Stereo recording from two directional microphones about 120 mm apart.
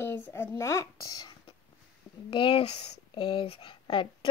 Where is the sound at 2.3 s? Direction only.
45° left (ahead or behind).